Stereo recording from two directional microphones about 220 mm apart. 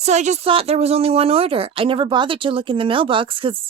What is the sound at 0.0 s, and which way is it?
Speech, 30° right (ahead or behind).